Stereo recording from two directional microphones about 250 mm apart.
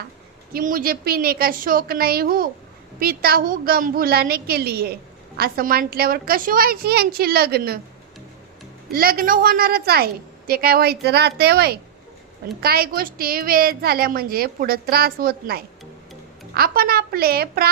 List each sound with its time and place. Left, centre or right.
0.5 s a woman's voice: right
8.9 s a woman's voice: right